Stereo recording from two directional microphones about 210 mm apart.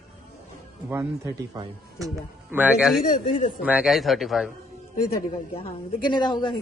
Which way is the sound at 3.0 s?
40° left (ahead or behind).